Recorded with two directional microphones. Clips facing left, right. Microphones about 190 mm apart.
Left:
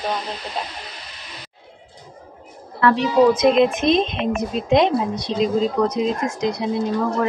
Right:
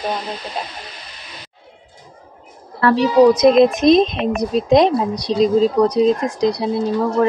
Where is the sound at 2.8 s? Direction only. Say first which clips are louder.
Right 3 dB; 35° right (ahead or behind).